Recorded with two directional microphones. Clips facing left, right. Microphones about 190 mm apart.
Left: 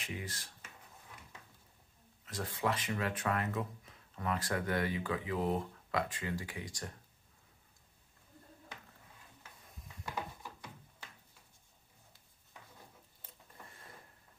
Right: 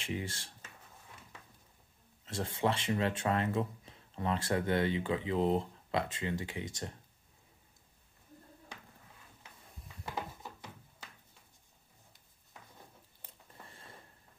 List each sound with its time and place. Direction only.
0.0 s speech: 30° right (ahead or behind)
2.2 s speech: 25° right (ahead or behind)